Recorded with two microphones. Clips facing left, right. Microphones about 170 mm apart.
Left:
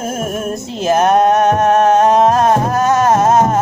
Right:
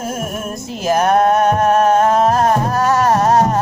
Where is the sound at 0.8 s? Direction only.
25° left (ahead or behind).